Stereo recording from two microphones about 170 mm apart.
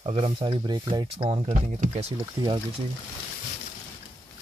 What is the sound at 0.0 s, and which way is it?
Speech, 35° right (ahead or behind).